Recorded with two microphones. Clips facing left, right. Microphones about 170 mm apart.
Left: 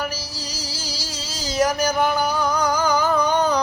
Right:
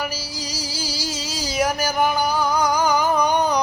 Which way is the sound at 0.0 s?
10° right (ahead or behind).